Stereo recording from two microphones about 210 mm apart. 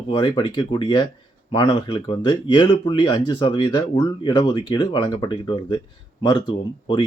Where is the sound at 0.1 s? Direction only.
20° left (ahead or behind).